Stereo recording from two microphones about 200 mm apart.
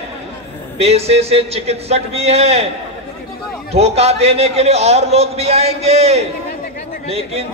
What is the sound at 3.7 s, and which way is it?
A man's voice, 30° right (ahead or behind).